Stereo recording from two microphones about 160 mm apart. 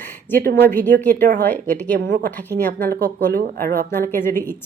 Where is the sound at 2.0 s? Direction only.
55° right (ahead or behind).